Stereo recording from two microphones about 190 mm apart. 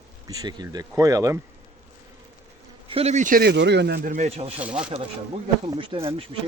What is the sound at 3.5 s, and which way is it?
Speech, 65° right (ahead or behind).